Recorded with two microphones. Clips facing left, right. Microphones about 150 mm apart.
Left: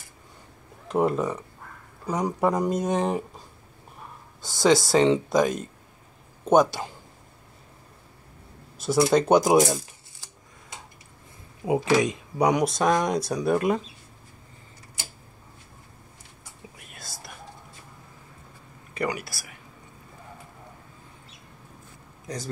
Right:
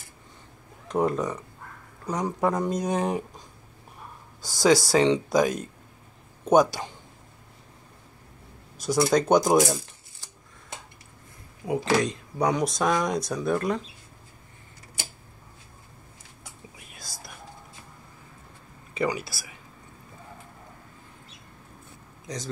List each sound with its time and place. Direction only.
0.8 s speech: 5° left (ahead or behind)
8.7 s speech: 5° left (ahead or behind)
11.6 s speech: 20° left (ahead or behind)
12.6 s speech: 5° left (ahead or behind)
16.7 s whispering: centre (ahead or behind)
22.2 s a man's voice: 5° left (ahead or behind)